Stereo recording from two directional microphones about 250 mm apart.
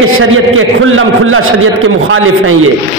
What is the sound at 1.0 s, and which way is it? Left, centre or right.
A man's voice, right.